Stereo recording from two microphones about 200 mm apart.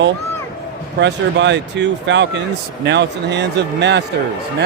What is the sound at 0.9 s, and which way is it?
Speech, 60° right (ahead or behind).